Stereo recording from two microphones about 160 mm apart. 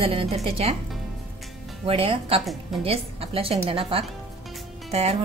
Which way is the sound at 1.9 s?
35° right (ahead or behind).